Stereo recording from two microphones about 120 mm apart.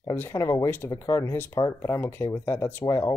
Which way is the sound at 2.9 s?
30° left (ahead or behind).